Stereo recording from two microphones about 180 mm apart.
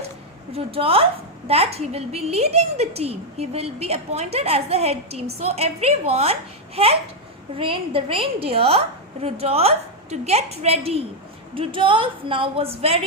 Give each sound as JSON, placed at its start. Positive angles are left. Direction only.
{"t": 0.5, "sound": "a woman's voice", "side_deg": -30}